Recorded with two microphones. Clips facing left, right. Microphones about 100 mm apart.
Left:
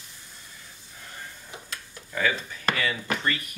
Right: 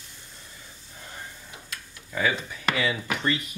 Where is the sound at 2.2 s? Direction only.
15° right (ahead or behind).